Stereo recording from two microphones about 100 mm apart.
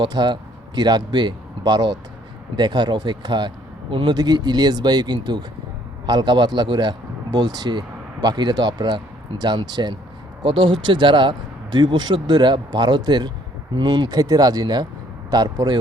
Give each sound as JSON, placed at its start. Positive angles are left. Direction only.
{"t": 0.0, "sound": "speech", "side_deg": -45}
{"t": 4.1, "sound": "speech", "side_deg": -40}